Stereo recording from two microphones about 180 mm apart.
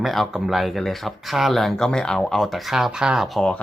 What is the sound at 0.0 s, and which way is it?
Speech, centre (ahead or behind).